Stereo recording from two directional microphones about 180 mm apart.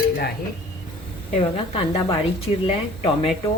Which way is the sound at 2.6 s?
35° left (ahead or behind).